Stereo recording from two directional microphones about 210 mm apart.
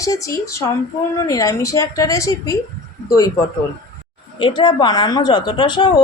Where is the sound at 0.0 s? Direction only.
15° left (ahead or behind).